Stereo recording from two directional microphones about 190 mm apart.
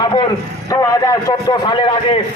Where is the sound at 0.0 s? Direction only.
25° left (ahead or behind).